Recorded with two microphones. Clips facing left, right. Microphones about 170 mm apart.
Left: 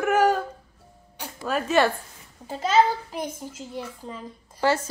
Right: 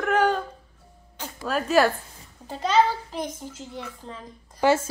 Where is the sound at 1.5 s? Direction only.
Centre (ahead or behind).